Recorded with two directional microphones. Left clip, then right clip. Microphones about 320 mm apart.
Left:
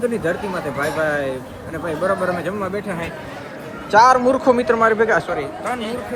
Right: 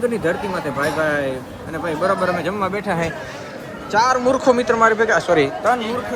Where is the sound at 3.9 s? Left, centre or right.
Centre.